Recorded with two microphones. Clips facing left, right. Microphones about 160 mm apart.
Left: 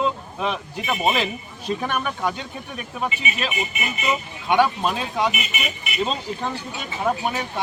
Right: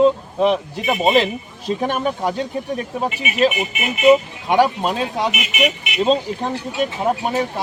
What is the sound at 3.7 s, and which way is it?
Speech, 70° right (ahead or behind).